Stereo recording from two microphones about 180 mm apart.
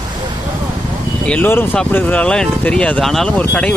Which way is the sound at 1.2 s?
10° left (ahead or behind).